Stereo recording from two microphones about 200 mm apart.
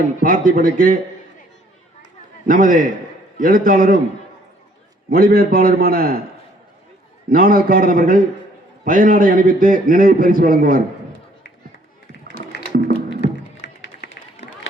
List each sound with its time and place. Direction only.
0.2 s a man's voice: 45° right (ahead or behind)
2.5 s a man's voice: 45° right (ahead or behind)
5.0 s a man's voice: 45° right (ahead or behind)
7.3 s a man's voice: 45° right (ahead or behind)
12.3 s music: 55° left (ahead or behind)
13.2 s a sound: 55° left (ahead or behind)